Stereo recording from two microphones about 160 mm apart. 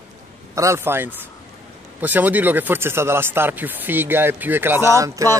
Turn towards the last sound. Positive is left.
turn(degrees=-20)  # may be behind; listen again after turning